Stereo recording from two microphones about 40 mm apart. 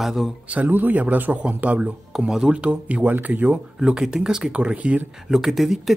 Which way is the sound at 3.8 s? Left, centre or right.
Centre.